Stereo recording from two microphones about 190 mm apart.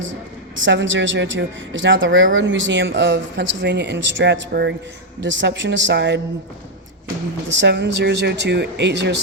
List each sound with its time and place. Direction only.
0.6 s speech: 75° right (ahead or behind)
7.5 s speech: 65° right (ahead or behind)